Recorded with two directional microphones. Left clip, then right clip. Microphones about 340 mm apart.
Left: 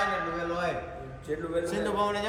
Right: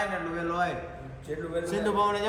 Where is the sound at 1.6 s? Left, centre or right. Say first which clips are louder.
Right 2 dB; centre.